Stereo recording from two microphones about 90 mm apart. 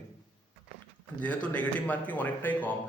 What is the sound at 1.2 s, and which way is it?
Speech, 15° left (ahead or behind).